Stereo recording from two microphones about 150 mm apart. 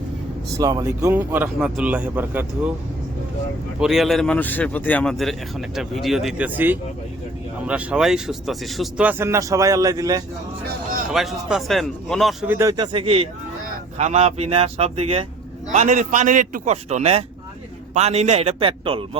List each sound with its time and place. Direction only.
0.6 s speech: 25° right (ahead or behind)
1.1 s speech: 15° right (ahead or behind)
3.8 s speech: 5° right (ahead or behind); by 10.2 s 25° right (ahead or behind)
11.1 s speech: centre (ahead or behind)
12.5 s speech: 15° right (ahead or behind)
12.7 s a man's voice: 30° right (ahead or behind)
15.7 s a man's voice: 55° right (ahead or behind); by 19.2 s 35° right (ahead or behind)